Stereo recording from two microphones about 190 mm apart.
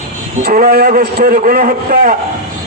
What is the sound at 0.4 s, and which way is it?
A man's voice, 50° right (ahead or behind).